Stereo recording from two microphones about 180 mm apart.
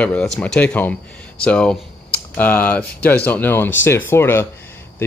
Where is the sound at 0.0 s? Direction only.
5° left (ahead or behind).